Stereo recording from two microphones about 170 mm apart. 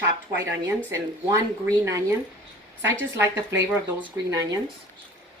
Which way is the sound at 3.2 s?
20° right (ahead or behind).